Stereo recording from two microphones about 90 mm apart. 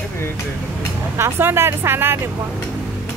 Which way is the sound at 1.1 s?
25° right (ahead or behind).